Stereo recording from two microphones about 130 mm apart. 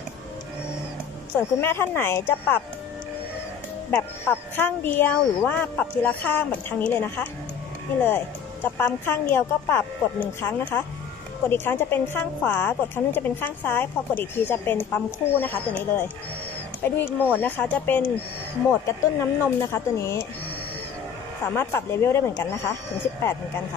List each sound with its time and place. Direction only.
1.6 s a woman's voice: 20° left (ahead or behind)
3.9 s a woman's voice: 15° left (ahead or behind)
8.7 s a woman's voice: 15° left (ahead or behind)
21.5 s speech: 20° left (ahead or behind)